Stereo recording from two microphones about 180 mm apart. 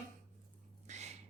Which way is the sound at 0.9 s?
40° right (ahead or behind).